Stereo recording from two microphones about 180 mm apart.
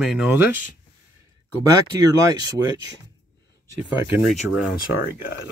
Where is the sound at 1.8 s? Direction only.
20° right (ahead or behind).